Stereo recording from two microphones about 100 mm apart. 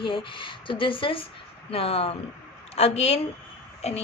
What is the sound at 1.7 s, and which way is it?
Speech, 80° left.